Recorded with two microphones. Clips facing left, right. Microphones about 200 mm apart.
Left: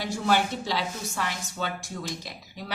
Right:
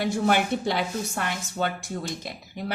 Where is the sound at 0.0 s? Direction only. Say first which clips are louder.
Right 2 dB; 55° right (ahead or behind).